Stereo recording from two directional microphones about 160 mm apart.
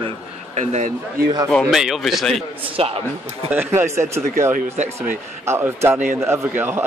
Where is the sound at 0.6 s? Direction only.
45° right (ahead or behind).